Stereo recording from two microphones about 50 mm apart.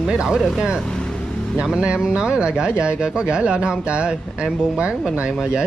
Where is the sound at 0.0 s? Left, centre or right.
Centre.